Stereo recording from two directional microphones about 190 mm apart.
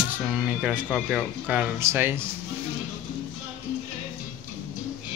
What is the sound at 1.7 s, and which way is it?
Mantra, 10° right (ahead or behind).